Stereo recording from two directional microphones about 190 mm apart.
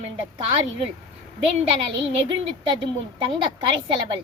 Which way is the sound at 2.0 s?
30° right (ahead or behind).